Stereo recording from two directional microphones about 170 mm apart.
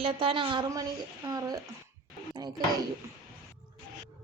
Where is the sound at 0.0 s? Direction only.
35° right (ahead or behind).